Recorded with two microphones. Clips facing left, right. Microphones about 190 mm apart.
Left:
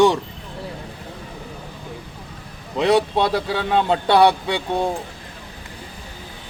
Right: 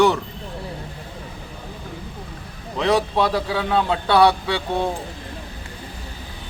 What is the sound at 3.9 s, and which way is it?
Speech, 25° left (ahead or behind).